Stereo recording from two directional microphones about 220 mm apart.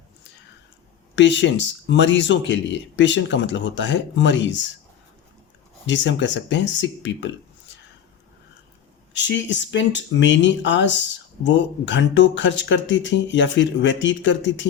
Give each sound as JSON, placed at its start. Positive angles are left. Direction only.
{"t": 1.1, "sound": "speech", "side_deg": 55}
{"t": 5.8, "sound": "speech", "side_deg": 55}
{"t": 9.1, "sound": "speech", "side_deg": 55}